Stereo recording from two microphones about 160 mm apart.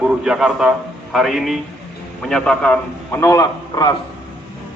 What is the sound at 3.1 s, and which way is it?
Speech, 20° left (ahead or behind).